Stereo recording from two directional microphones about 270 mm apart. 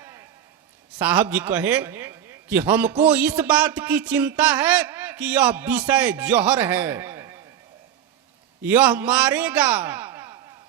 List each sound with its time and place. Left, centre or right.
0.0 s a sound: centre
0.9 s a man's voice: centre
8.6 s a man's voice: centre